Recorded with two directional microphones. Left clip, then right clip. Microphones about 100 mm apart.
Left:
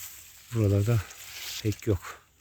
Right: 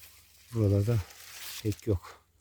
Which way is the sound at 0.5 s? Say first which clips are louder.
Left 2 dB; 30° right (ahead or behind).